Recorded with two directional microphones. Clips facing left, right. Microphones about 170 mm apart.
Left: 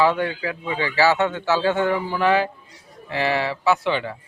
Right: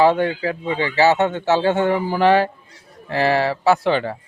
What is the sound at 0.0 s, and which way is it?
Speech, 30° right (ahead or behind).